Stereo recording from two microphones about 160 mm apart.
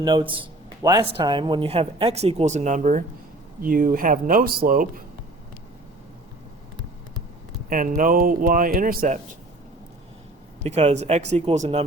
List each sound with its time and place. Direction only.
0.0 s a man's voice: 30° right (ahead or behind); by 3.0 s 50° right (ahead or behind)
3.6 s speech: 60° right (ahead or behind)
7.7 s speech: 60° right (ahead or behind)
10.6 s speech: 40° right (ahead or behind)